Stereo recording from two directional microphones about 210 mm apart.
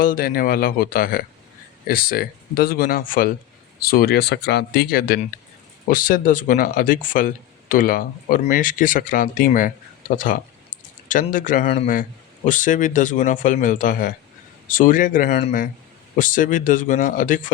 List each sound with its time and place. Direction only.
0.0 s speech: 45° left (ahead or behind)